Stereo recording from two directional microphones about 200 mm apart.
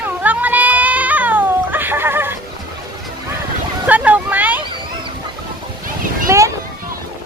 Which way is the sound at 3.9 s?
10° right (ahead or behind).